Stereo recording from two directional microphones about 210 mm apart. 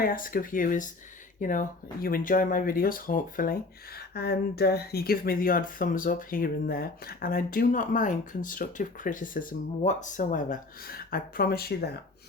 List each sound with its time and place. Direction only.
0.0 s speech: 40° left (ahead or behind)